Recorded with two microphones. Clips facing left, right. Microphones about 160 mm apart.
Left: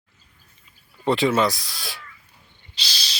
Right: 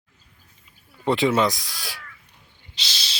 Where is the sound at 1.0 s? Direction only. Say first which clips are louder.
Even; 20° right (ahead or behind).